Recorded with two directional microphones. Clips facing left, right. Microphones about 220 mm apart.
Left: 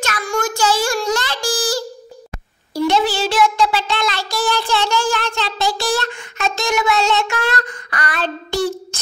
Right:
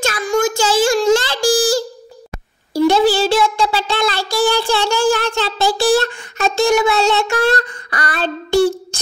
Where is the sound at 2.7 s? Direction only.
35° right (ahead or behind).